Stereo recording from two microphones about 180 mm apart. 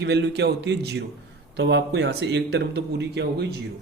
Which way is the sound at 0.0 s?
70° right (ahead or behind).